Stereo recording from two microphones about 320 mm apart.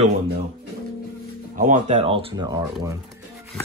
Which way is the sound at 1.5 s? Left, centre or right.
Right.